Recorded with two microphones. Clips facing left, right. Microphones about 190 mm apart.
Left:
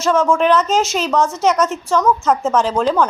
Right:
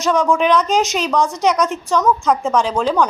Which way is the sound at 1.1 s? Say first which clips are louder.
Left 2 dB; 15° right (ahead or behind).